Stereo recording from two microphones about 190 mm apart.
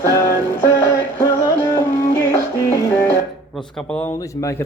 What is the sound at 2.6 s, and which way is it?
Music, 15° left (ahead or behind).